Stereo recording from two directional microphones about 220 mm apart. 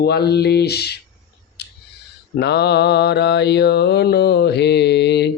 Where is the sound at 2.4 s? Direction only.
50° left (ahead or behind).